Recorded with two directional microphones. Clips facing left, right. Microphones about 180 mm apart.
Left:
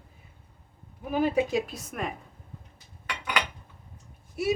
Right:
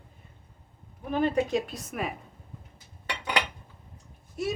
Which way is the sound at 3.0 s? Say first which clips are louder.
Right 2 dB; 30° right (ahead or behind).